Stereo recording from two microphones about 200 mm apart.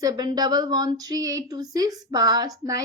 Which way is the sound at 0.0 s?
20° right (ahead or behind).